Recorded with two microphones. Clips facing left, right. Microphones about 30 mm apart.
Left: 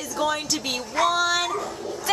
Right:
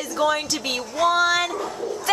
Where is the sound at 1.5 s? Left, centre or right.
Centre.